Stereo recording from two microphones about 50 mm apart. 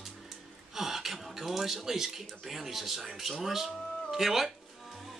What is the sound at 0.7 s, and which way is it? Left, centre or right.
Speech, centre.